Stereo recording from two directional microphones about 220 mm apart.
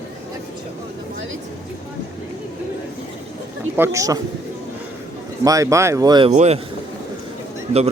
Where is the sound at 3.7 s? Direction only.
10° right (ahead or behind).